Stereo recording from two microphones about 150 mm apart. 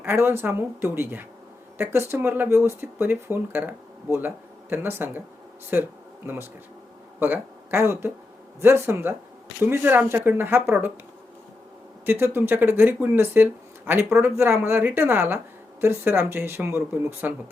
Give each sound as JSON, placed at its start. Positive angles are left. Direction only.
{"t": 0.0, "sound": "speech", "side_deg": -15}
{"t": 12.0, "sound": "speech", "side_deg": -15}